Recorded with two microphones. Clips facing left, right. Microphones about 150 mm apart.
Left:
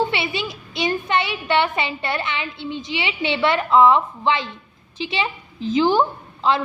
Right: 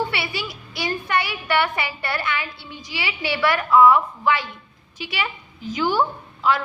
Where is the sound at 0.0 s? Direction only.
20° left (ahead or behind).